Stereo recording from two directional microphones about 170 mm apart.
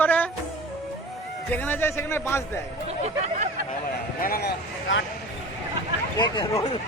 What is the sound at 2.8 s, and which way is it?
Speech, 40° right (ahead or behind).